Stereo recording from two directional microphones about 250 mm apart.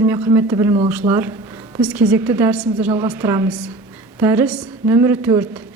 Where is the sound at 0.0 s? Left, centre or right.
Centre.